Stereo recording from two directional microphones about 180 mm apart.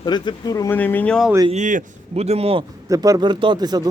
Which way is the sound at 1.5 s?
45° right (ahead or behind).